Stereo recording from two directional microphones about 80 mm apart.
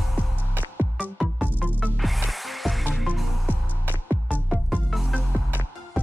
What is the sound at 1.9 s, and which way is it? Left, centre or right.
Music, centre.